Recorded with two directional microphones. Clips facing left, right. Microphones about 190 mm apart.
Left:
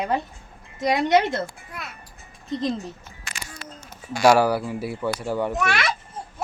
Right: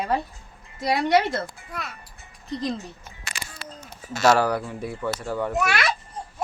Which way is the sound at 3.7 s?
10° left (ahead or behind).